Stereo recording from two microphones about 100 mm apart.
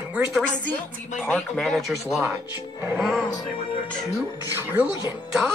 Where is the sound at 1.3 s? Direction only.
Centre (ahead or behind).